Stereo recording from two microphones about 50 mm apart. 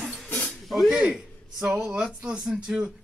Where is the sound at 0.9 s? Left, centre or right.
Centre.